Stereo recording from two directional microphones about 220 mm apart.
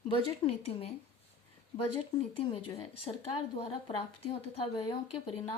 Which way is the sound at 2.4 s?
25° left (ahead or behind).